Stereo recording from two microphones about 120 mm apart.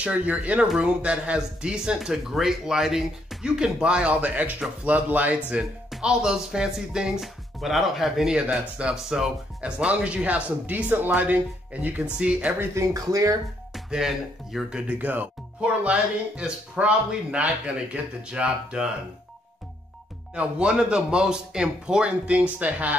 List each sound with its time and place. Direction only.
0.0 s speech: 10° right (ahead or behind)
12.5 s speech: 25° right (ahead or behind)
13.7 s speech: 5° right (ahead or behind)
20.3 s speech: 10° right (ahead or behind)